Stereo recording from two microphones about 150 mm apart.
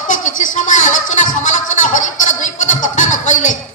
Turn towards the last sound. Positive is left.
turn(degrees=55)  # may be behind; listen again after turning